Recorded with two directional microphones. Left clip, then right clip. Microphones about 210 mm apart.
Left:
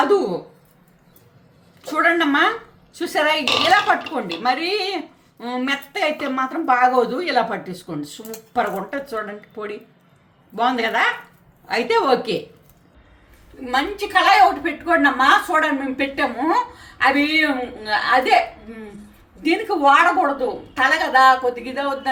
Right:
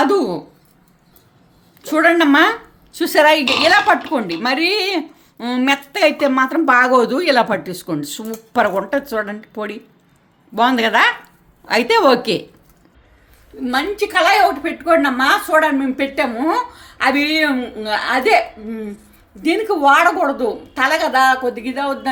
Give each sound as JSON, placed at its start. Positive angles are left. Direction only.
{"t": 1.9, "sound": "a woman's voice", "side_deg": -45}
{"t": 13.7, "sound": "a woman's voice", "side_deg": -50}
{"t": 19.4, "sound": "a woman's voice", "side_deg": -50}